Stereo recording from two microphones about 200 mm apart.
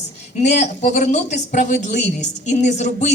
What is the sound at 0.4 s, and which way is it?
Speech, 35° left (ahead or behind).